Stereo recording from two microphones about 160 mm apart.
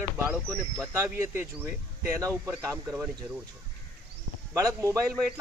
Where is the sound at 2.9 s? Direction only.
5° right (ahead or behind).